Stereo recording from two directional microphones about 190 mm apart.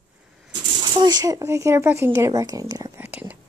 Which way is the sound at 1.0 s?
20° right (ahead or behind).